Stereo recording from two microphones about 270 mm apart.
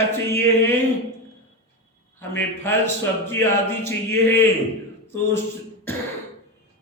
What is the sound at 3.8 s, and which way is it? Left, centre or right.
Speech, centre.